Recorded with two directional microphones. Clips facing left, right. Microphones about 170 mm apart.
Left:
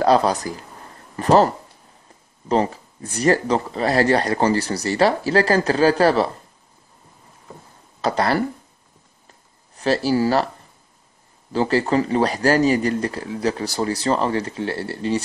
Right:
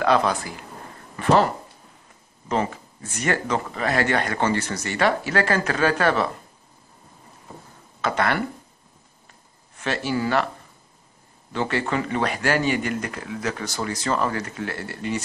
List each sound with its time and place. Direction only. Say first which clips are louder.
0.0 s speech: left 4 dB; 35° left (ahead or behind)
8.0 s speech: left 3 dB; 35° left (ahead or behind)
9.8 s speech: left 6 dB; 35° left (ahead or behind)
11.5 s speech: left 6 dB; 35° left (ahead or behind)